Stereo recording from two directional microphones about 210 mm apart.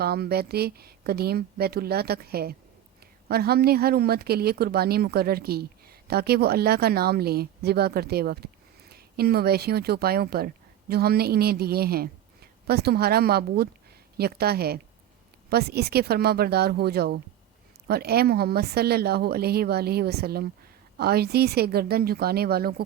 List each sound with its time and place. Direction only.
0.0 s speech: 50° right (ahead or behind)